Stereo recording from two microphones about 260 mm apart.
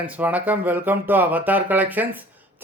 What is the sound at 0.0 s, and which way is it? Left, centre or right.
Speech, centre.